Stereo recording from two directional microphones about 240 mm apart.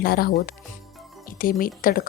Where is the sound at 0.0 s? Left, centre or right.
Left.